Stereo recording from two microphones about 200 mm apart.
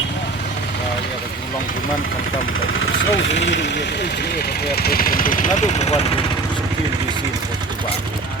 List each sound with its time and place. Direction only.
2.8 s speech: 65° left (ahead or behind)
4.7 s speech: 50° left (ahead or behind)